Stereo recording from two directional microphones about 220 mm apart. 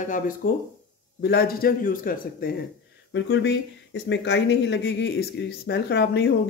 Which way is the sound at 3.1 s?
55° left (ahead or behind).